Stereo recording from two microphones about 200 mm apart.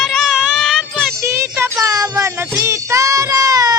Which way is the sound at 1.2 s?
15° right (ahead or behind).